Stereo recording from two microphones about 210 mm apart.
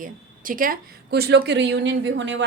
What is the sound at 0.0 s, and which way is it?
A woman's voice, 40° right (ahead or behind).